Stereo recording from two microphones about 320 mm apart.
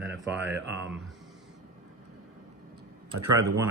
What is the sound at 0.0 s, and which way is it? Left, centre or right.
Mantra, right.